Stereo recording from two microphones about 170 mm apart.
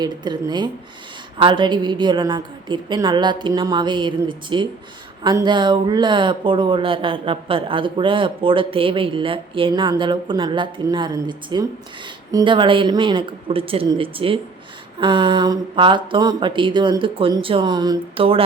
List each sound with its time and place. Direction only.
0.0 s speech: 25° right (ahead or behind)